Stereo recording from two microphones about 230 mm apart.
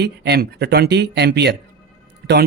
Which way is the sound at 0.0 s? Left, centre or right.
Right.